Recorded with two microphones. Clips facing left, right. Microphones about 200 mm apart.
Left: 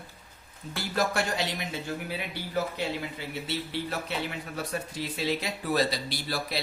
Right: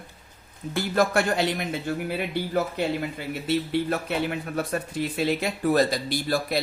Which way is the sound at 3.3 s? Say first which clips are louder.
Right 10 dB; 50° right (ahead or behind).